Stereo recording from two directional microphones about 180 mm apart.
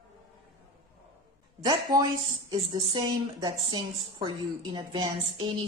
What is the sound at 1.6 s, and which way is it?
Speech, 20° right (ahead or behind).